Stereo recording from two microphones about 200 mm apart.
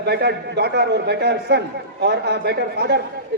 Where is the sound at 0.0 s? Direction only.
55° right (ahead or behind).